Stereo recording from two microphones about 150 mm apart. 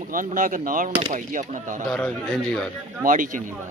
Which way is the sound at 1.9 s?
5° left (ahead or behind).